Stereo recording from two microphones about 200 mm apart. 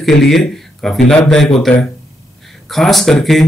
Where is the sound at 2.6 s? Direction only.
Centre (ahead or behind).